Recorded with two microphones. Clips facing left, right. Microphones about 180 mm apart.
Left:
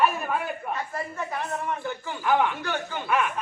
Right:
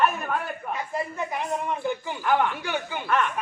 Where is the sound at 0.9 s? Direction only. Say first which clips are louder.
Right 2 dB; 15° right (ahead or behind).